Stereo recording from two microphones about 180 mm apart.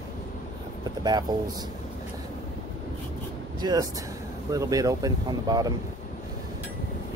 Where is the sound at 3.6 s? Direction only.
20° right (ahead or behind).